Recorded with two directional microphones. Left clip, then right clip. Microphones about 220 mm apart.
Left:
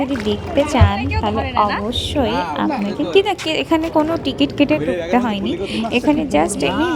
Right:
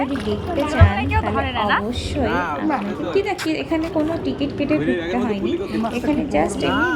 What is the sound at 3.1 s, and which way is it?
Speech, 45° left (ahead or behind).